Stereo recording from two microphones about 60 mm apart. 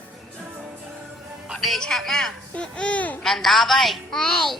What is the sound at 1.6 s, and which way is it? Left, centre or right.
Speech, centre.